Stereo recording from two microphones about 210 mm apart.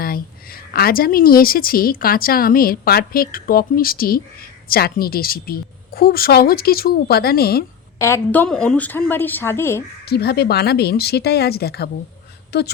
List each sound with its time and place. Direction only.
0.0 s a woman's voice: 45° left (ahead or behind)
7.9 s a woman's voice: 10° left (ahead or behind)
10.1 s a woman's voice: 50° left (ahead or behind)